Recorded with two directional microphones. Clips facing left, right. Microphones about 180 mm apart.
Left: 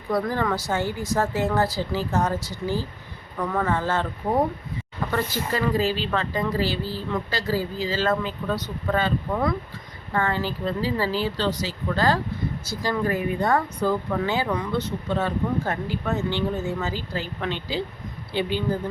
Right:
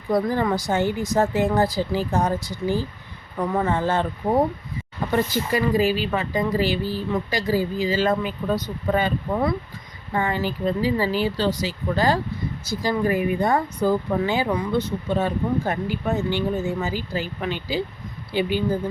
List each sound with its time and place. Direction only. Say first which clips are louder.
0.1 s speech: right 3 dB; 15° right (ahead or behind)